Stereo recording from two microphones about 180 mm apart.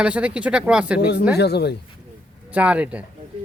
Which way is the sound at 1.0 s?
65° left (ahead or behind).